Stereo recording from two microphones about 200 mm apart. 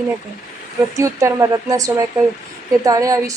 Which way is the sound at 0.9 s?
15° right (ahead or behind).